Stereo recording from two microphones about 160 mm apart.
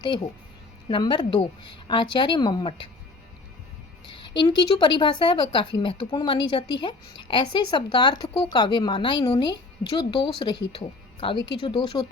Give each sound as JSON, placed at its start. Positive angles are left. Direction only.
{"t": 0.9, "sound": "speech", "side_deg": 30}
{"t": 4.1, "sound": "speech", "side_deg": 30}